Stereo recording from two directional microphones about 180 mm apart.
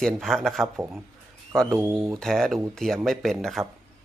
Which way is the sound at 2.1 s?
5° left (ahead or behind).